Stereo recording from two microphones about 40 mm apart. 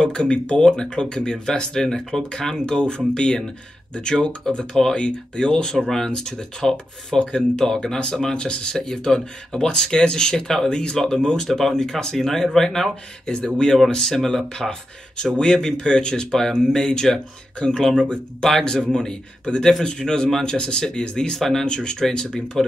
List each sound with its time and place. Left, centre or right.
0.0 s speech: left
20.2 s speech: centre
20.5 s speech: left
21.6 s speech: left